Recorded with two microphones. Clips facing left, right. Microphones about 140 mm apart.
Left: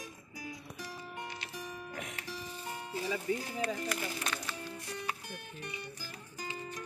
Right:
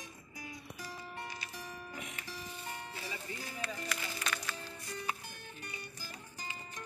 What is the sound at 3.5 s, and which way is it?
Speech, 50° left (ahead or behind).